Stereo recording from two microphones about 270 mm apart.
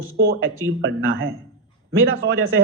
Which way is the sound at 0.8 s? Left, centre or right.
Right.